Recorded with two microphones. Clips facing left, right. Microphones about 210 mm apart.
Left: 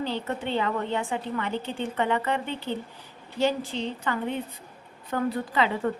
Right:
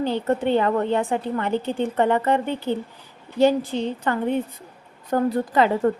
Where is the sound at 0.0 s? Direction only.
50° right (ahead or behind).